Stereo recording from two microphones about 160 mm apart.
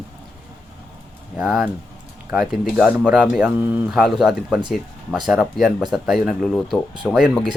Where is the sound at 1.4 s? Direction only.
Centre (ahead or behind).